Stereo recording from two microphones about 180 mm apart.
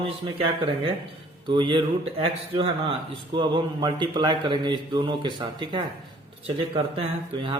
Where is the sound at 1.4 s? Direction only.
25° right (ahead or behind).